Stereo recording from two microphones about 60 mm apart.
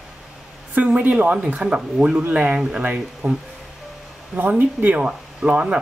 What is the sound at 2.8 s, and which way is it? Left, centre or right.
Speech, right.